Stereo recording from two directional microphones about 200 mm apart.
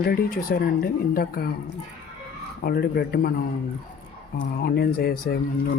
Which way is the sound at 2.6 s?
50° left (ahead or behind).